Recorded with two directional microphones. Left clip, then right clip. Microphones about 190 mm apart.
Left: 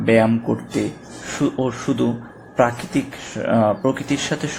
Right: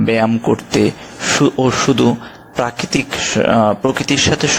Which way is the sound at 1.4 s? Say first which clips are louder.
Right 7 dB; 45° right (ahead or behind).